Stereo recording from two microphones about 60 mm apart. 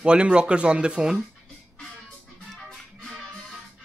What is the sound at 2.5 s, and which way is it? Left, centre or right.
Music, centre.